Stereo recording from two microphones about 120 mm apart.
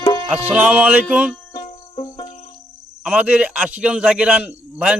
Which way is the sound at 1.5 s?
40° left (ahead or behind).